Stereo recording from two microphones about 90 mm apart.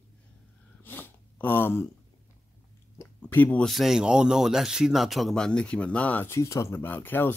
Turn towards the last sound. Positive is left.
turn(degrees=20)  # may be behind; listen again after turning